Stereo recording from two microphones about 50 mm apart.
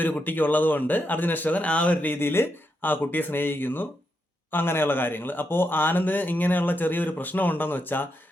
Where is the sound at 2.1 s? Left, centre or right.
Left.